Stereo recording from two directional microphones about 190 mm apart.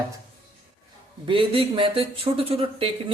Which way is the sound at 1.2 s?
30° right (ahead or behind).